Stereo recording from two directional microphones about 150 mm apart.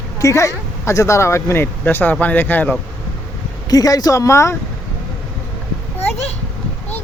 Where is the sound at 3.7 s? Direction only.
25° left (ahead or behind).